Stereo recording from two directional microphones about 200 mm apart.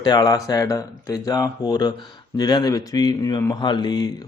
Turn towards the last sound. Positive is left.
turn(degrees=20)  # may be behind; listen again after turning